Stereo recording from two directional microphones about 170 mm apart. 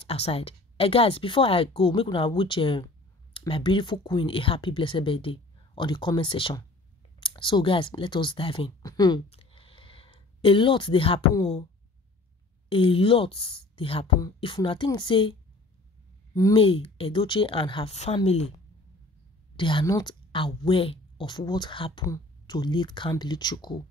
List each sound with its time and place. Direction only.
0.0 s a woman's voice: 35° left (ahead or behind)
9.3 s a sound: 35° left (ahead or behind)
12.6 s a woman's voice: 35° left (ahead or behind)
16.5 s a woman's voice: 35° left (ahead or behind)
19.5 s speech: 30° left (ahead or behind)